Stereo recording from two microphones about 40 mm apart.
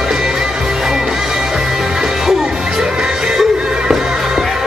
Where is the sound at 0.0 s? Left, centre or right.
Centre.